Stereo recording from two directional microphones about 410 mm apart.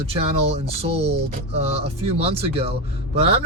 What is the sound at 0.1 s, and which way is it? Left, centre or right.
Speech, centre.